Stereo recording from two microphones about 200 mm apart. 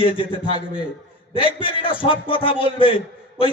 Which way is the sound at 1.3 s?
25° left (ahead or behind).